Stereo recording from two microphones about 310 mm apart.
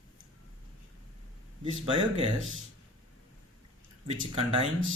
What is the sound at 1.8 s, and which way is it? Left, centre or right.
Speech, centre.